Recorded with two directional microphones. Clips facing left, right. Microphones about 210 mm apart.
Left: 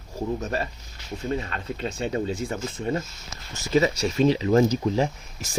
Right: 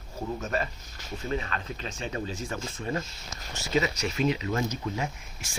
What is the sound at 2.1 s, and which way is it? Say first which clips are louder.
Speech: left 6 dB; 25° left (ahead or behind).